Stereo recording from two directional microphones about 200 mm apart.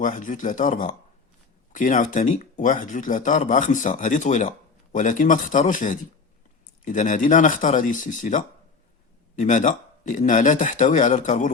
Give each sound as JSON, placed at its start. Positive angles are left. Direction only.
{"t": 0.0, "sound": "speech", "side_deg": 40}